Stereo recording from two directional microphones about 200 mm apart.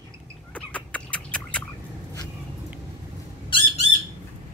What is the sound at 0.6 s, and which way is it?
Chicken, 5° left (ahead or behind).